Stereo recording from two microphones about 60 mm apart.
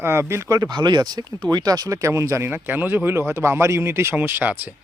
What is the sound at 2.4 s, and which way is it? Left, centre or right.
Speech, right.